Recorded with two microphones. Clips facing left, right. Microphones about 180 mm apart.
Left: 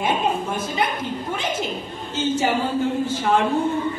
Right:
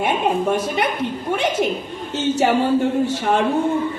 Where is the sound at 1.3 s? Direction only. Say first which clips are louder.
Right 8 dB; 70° right (ahead or behind).